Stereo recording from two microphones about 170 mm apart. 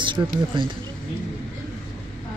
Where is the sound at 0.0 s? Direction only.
30° right (ahead or behind).